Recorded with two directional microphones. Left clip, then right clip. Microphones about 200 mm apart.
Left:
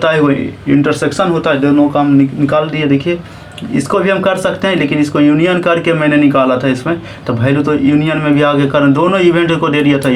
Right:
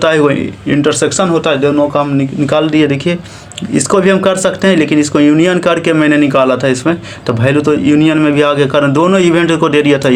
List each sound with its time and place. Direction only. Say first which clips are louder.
0.0 s speech: right 2 dB; 50° right (ahead or behind)